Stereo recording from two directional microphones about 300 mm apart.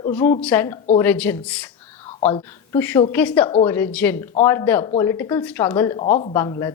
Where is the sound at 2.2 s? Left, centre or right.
Centre.